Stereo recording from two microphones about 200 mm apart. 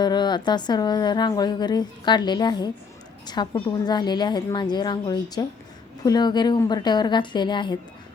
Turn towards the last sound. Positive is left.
turn(degrees=20)  # may be behind; listen again after turning